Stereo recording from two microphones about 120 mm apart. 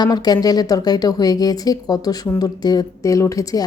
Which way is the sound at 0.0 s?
35° left (ahead or behind).